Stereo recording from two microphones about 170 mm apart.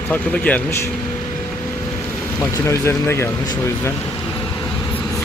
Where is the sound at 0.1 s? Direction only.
10° left (ahead or behind).